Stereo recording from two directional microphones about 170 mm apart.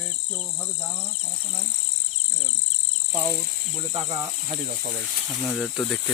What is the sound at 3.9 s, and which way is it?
Speech, 40° right (ahead or behind).